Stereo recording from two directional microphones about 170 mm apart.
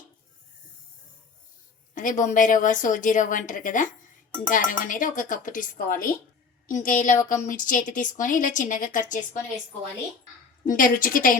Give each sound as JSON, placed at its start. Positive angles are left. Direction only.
{"t": 2.0, "sound": "a woman's voice", "side_deg": 50}
{"t": 10.7, "sound": "a woman's voice", "side_deg": 55}